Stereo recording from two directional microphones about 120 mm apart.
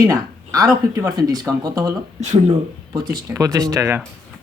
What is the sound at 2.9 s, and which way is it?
Speech, 35° right (ahead or behind).